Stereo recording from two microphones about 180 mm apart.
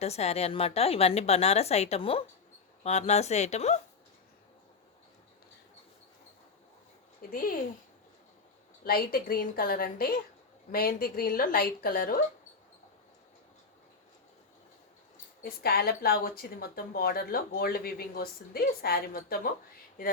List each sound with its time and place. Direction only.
0.0 s a woman's voice: 35° left (ahead or behind)
7.2 s speech: 50° left (ahead or behind)
8.8 s a woman's voice: 55° left (ahead or behind)
15.4 s a woman's voice: 60° left (ahead or behind)